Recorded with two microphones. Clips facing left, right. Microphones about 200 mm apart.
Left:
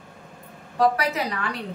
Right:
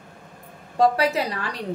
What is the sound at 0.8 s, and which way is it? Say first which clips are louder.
Speech: right 2 dB; 30° right (ahead or behind).